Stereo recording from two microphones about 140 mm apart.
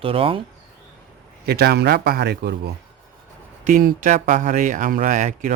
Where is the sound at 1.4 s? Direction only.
90° right.